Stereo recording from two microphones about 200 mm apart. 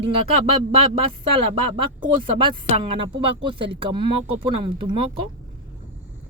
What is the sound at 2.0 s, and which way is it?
Speech, 25° right (ahead or behind).